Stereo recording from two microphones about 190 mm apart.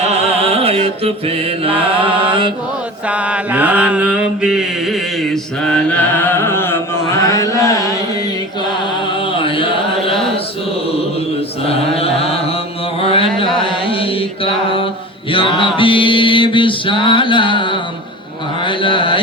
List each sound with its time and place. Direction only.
0.3 s mantra: 30° right (ahead or behind)
3.1 s mantra: 5° right (ahead or behind); by 7.7 s 15° left (ahead or behind)
9.3 s chant: 25° left (ahead or behind)
11.7 s mantra: 30° left (ahead or behind)
13.0 s carnatic music: 30° left (ahead or behind)
13.4 s mantra: 25° left (ahead or behind)
15.3 s music: 25° left (ahead or behind)
18.6 s a sound: 25° left (ahead or behind)